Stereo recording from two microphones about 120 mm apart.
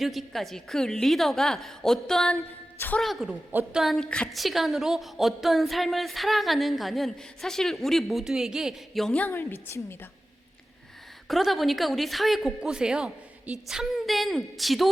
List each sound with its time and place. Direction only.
0.0 s a woman's voice: centre (ahead or behind)
2.7 s a woman's voice: 15° left (ahead or behind)
3.0 s a woman's voice: centre (ahead or behind)
3.5 s a woman's voice: 15° right (ahead or behind)
3.8 s a woman's voice: centre (ahead or behind); by 10.1 s 20° left (ahead or behind)
11.3 s a woman's voice: centre (ahead or behind)